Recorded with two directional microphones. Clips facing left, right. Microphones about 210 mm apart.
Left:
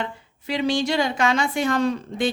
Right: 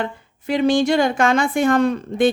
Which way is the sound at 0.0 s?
50° right (ahead or behind).